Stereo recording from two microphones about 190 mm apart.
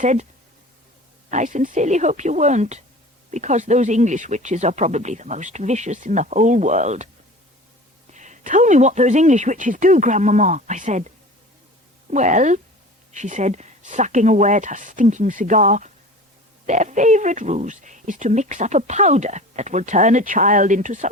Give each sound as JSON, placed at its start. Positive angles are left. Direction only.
{"t": 0.0, "sound": "speech", "side_deg": -40}
{"t": 1.3, "sound": "speech", "side_deg": -40}
{"t": 8.1, "sound": "speech", "side_deg": -40}
{"t": 12.1, "sound": "speech", "side_deg": -40}